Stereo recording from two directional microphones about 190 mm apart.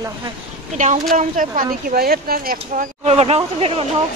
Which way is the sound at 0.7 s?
40° right (ahead or behind).